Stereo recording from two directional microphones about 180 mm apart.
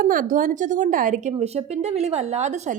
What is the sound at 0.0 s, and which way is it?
Speech, 50° right (ahead or behind).